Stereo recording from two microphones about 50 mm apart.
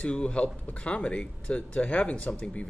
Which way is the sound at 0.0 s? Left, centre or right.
Left.